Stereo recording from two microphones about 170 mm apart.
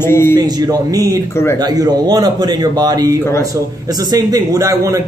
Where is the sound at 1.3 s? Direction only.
15° left (ahead or behind).